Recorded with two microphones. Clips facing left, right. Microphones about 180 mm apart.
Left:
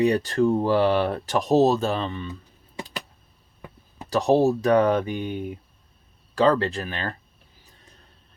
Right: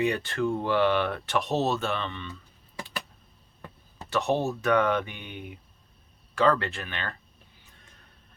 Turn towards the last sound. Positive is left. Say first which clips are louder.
# left 6 dB
turn(degrees=35)  # may be behind; listen again after turning